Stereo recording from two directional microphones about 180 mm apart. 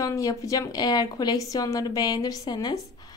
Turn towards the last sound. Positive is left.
turn(degrees=20)  # may be behind; listen again after turning